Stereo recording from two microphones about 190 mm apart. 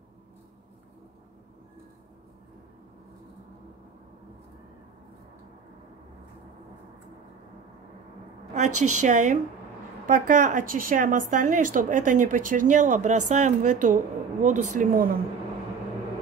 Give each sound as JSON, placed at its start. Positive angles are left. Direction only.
{"t": 8.5, "sound": "a woman's voice", "side_deg": -40}